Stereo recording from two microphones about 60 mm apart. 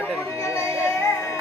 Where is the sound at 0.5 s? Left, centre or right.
Left.